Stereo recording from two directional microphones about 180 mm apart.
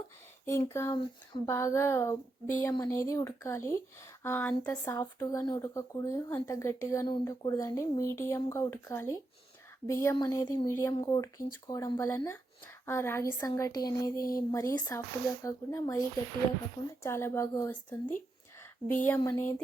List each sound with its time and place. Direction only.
0.4 s speech: 15° left (ahead or behind)
17.0 s speech: 15° left (ahead or behind)
18.9 s speech: 10° left (ahead or behind)